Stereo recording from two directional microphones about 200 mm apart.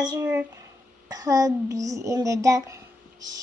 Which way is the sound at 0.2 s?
10° right (ahead or behind).